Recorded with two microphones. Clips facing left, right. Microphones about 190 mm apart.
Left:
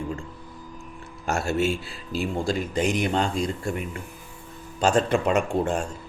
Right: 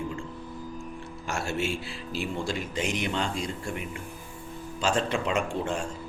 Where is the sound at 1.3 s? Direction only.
40° left (ahead or behind).